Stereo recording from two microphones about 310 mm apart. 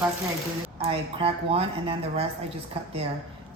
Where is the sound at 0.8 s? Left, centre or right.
Centre.